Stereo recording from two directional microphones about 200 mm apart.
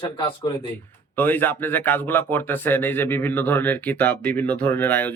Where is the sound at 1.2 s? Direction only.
10° left (ahead or behind).